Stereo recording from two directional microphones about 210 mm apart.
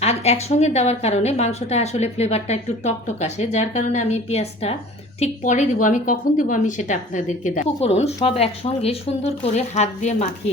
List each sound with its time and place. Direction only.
0.0 s a woman's voice: 30° left (ahead or behind)